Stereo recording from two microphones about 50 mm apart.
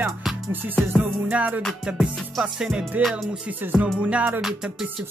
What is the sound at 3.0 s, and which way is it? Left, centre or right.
Music, right.